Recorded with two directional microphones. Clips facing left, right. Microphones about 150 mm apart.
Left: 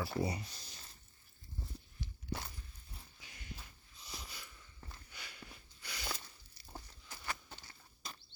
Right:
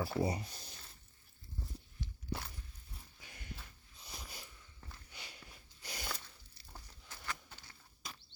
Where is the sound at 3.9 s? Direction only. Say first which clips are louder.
Even; 55° right (ahead or behind).